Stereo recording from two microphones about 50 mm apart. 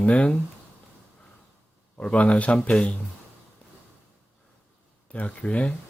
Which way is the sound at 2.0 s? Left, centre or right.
Left.